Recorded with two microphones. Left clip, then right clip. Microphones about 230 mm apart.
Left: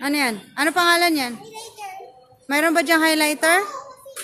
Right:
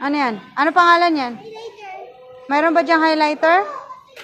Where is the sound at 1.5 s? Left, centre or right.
Left.